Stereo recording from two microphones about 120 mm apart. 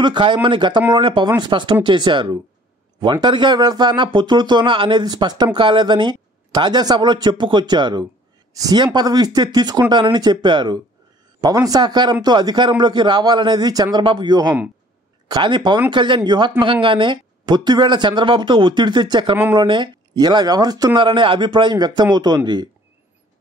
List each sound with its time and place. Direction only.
0.0 s speech: 40° right (ahead or behind)
11.4 s speech: 30° right (ahead or behind)